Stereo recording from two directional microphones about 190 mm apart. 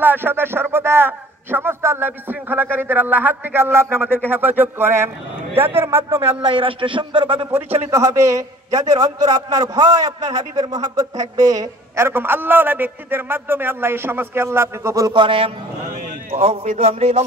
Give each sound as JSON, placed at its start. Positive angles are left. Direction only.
{"t": 0.0, "sound": "a man's voice", "side_deg": -10}
{"t": 6.4, "sound": "speech", "side_deg": -25}
{"t": 7.9, "sound": "a man's voice", "side_deg": -15}